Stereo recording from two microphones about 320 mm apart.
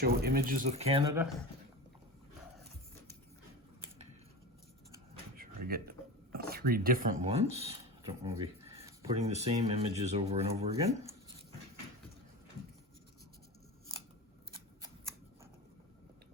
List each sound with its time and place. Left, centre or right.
0.0 s speech: right
5.4 s speech: right